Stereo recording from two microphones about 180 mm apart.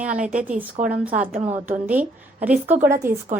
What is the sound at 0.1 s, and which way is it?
Speech, 40° right (ahead or behind).